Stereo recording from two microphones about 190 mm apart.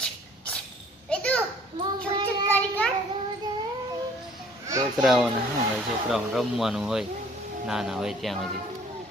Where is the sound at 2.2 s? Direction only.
10° left (ahead or behind).